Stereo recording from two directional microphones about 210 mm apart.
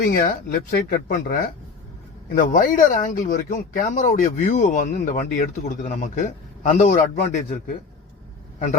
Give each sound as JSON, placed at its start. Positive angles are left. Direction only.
{"t": 0.0, "sound": "speech", "side_deg": 40}